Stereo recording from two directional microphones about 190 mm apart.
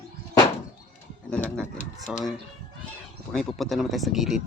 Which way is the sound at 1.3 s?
5° left (ahead or behind).